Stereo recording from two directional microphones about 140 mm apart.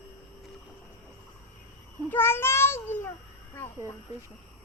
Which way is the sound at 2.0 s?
15° left (ahead or behind).